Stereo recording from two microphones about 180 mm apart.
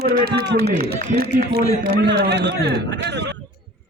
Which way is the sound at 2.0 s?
70° right (ahead or behind).